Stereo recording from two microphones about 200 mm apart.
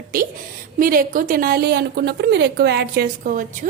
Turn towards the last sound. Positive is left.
turn(degrees=-40)  # may be behind; listen again after turning